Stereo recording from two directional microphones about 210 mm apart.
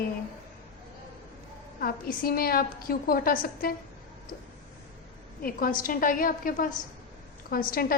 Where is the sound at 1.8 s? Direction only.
45° left (ahead or behind).